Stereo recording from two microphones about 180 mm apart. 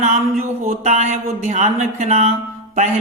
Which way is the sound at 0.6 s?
40° right (ahead or behind).